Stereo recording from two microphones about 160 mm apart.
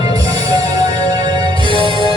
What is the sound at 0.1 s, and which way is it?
Music, 25° right (ahead or behind).